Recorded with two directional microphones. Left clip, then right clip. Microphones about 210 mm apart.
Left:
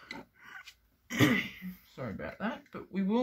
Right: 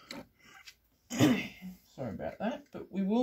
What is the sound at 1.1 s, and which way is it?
Throat clearing, 15° left (ahead or behind).